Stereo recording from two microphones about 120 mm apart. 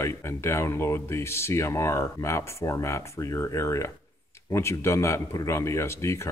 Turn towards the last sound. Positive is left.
turn(degrees=25)  # may be behind; listen again after turning